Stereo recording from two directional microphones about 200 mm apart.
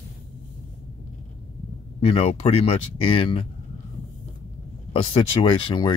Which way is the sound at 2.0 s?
30° left (ahead or behind).